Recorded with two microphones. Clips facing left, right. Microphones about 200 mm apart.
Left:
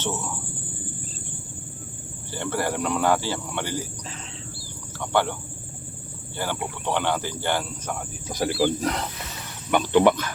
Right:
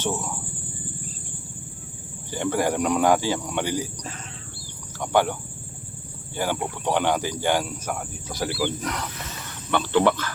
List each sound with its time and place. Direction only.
0.0 s cricket: 10° right (ahead or behind)
2.3 s speech: 15° right (ahead or behind)
4.9 s speech: 15° right (ahead or behind)
8.5 s speech: 35° left (ahead or behind)
9.7 s speech: 15° left (ahead or behind)